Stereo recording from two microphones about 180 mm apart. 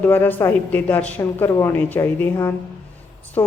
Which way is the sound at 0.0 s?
10° left (ahead or behind).